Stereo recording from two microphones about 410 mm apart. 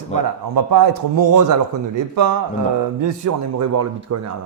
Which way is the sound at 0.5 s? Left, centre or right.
Right.